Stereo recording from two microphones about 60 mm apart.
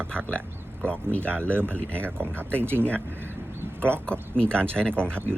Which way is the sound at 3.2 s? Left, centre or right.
Right.